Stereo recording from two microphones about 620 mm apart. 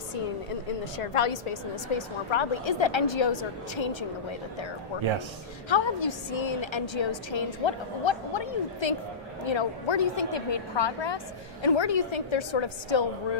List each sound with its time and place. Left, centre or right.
0.9 s a woman's voice: left